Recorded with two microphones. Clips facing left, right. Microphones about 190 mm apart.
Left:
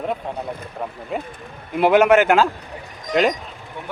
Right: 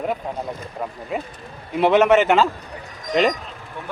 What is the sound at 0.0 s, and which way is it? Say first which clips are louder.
Speech: even; 5° right (ahead or behind).